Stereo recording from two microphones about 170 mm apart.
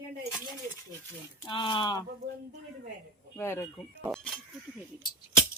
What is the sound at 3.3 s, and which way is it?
Speech, 15° left (ahead or behind).